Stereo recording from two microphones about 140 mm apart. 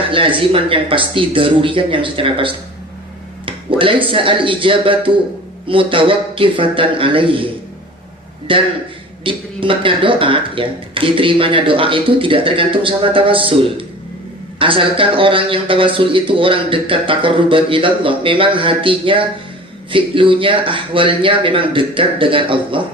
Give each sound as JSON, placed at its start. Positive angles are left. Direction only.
{"t": 0.1, "sound": "a man's voice", "side_deg": -40}